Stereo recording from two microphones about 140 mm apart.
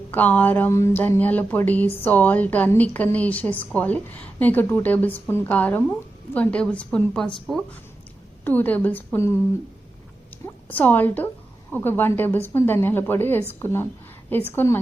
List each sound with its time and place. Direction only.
0.1 s a woman's voice: 10° left (ahead or behind)
8.4 s a woman's voice: 10° left (ahead or behind)
10.4 s a woman's voice: 10° left (ahead or behind)